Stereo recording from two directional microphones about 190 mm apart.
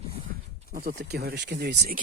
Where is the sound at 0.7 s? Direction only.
50° right (ahead or behind).